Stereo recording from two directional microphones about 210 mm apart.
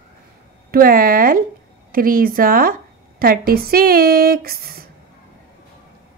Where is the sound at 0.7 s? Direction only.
45° right (ahead or behind).